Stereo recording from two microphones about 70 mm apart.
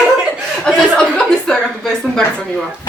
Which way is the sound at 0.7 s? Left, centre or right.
Centre.